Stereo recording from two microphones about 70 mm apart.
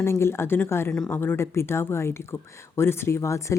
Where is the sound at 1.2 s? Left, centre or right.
Left.